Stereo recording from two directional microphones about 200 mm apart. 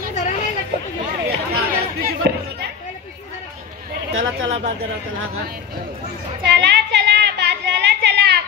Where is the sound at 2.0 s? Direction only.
50° right (ahead or behind).